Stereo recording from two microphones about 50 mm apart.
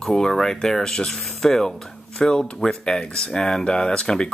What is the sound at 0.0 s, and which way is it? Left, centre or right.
Speech, centre.